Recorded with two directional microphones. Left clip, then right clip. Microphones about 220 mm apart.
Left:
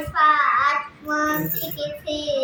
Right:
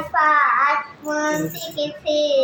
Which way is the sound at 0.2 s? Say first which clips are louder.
Right 1 dB; 10° left (ahead or behind).